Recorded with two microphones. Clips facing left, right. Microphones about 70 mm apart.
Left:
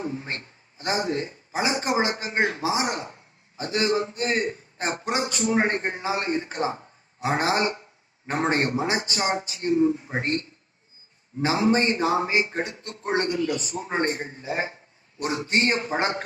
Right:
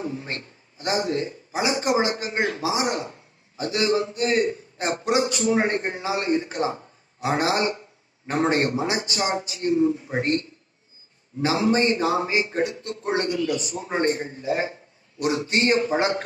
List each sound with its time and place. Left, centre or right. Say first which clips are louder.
0.0 s a man's voice: right 1 dB; left